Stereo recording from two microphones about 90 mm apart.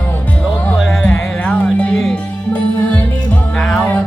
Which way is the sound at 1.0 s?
15° left (ahead or behind).